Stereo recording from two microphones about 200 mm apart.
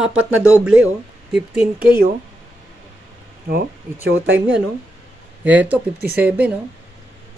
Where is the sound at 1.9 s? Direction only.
45° right (ahead or behind).